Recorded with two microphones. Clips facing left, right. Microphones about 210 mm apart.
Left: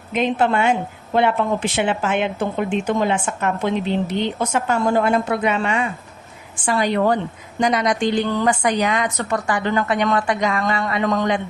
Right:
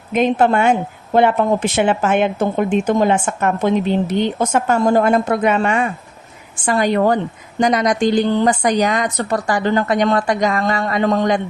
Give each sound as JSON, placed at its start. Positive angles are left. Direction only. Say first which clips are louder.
{"t": 0.1, "sound": "a woman's voice", "louder": "right 4 dB", "side_deg": -45}